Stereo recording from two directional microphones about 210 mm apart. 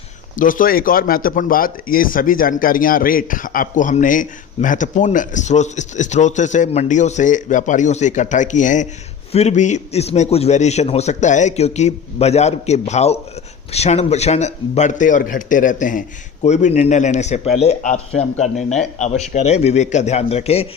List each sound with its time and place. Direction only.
0.3 s speech: 40° left (ahead or behind)